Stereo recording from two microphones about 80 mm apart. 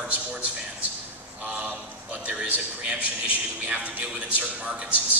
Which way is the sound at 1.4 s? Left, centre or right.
Centre.